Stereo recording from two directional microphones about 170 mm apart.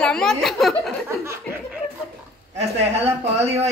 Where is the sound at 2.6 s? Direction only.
40° right (ahead or behind).